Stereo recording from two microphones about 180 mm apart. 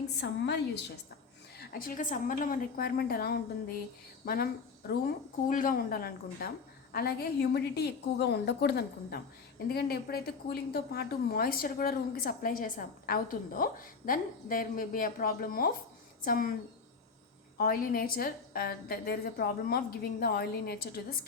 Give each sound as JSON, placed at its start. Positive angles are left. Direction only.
{"t": 0.2, "sound": "a woman's voice", "side_deg": 65}
{"t": 1.5, "sound": "a woman's voice", "side_deg": 55}
{"t": 5.5, "sound": "a woman's voice", "side_deg": 50}
{"t": 17.6, "sound": "a woman's voice", "side_deg": 55}